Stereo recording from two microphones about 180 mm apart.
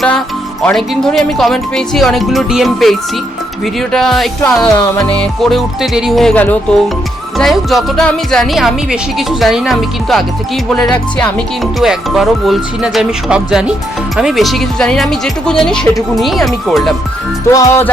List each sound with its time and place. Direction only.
0.6 s speech: centre (ahead or behind)
17.5 s music: 15° left (ahead or behind)